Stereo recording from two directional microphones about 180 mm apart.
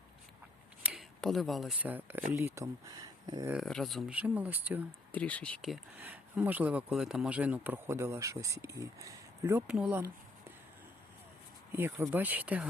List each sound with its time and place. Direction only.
0.8 s a sound: 10° right (ahead or behind)
1.2 s speech: centre (ahead or behind); by 3.5 s 20° right (ahead or behind)
3.5 s speech: centre (ahead or behind)
5.1 s speech: 5° left (ahead or behind)
6.0 s speech: 10° right (ahead or behind)
11.7 s speech: 15° right (ahead or behind)